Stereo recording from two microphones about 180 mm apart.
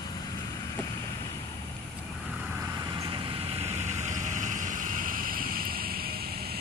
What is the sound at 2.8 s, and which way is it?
Vehicle, 25° right (ahead or behind).